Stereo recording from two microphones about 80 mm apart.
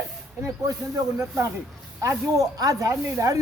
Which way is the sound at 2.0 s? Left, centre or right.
Right.